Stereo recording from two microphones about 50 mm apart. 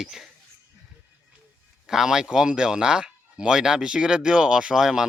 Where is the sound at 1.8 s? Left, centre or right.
Centre.